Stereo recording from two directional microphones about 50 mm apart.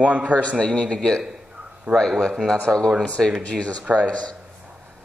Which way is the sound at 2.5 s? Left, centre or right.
Centre.